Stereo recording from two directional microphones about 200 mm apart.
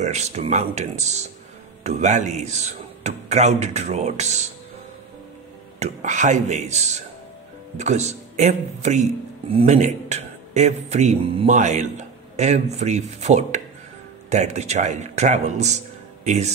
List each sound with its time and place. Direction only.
0.0 s a man's voice: 35° right (ahead or behind)
5.8 s a man's voice: 35° right (ahead or behind)